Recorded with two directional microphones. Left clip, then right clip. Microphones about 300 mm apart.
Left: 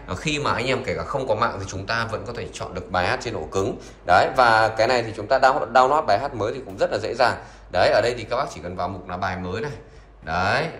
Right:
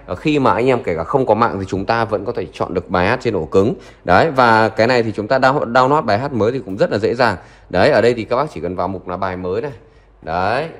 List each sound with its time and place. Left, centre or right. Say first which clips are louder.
0.1 s speech: right 9 dB; centre